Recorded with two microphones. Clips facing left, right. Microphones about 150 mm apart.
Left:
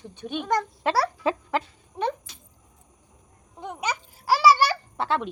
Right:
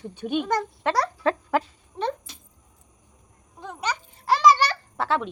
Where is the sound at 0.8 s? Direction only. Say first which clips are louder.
Right 2 dB; 5° left (ahead or behind).